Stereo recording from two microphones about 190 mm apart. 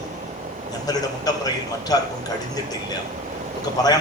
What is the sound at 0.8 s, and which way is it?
A man's voice, 20° left (ahead or behind).